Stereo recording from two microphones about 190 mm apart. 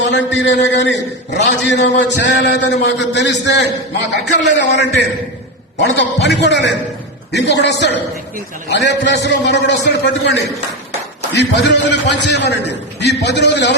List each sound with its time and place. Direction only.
0.1 s a man's voice: 70° left (ahead or behind)
4.7 s a man's voice: 65° left (ahead or behind)